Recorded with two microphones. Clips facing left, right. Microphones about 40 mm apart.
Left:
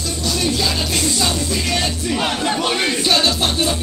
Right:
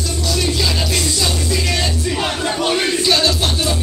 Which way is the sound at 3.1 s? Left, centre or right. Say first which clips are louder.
Left 1 dB; left.